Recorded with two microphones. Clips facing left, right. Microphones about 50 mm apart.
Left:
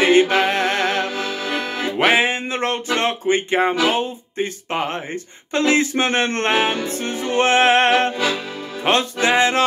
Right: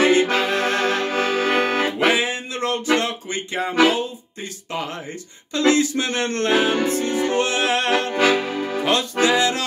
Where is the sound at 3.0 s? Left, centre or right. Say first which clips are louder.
Left 7 dB; left.